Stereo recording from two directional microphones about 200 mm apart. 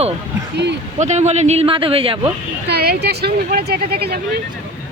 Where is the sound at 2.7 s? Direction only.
55° right (ahead or behind).